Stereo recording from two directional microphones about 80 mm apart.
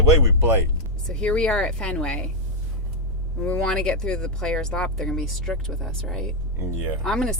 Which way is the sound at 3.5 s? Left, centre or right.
Centre.